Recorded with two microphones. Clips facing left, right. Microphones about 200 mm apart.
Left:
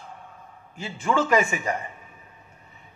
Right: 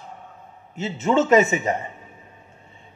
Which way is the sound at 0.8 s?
20° right (ahead or behind).